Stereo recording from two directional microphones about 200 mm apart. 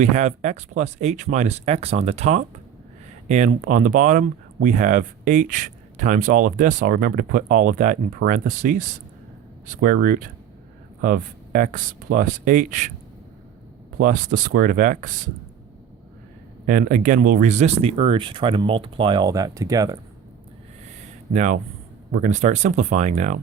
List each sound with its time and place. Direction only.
0.0 s speech: 35° right (ahead or behind)
14.0 s speech: 40° right (ahead or behind)
16.6 s speech: 45° right (ahead or behind); by 20.0 s 15° right (ahead or behind)
21.3 s speech: 35° right (ahead or behind)